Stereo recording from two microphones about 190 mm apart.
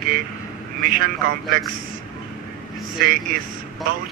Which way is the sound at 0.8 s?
50° right (ahead or behind).